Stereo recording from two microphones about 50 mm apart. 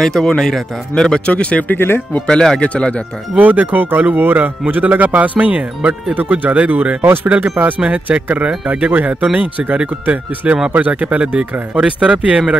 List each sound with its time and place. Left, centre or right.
0.0 s speech: centre
1.2 s speech: left
1.7 s speech: left
2.2 s speech: centre
3.3 s a man's voice: right